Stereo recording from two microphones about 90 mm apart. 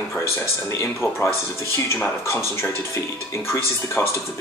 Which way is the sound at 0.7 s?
30° left (ahead or behind).